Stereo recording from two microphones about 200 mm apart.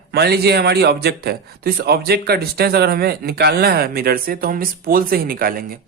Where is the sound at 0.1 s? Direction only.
50° right (ahead or behind).